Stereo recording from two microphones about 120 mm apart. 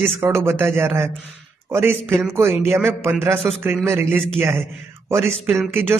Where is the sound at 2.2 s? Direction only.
20° right (ahead or behind).